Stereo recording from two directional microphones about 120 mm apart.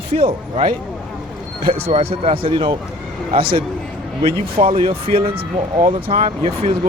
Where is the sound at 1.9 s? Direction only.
55° right (ahead or behind).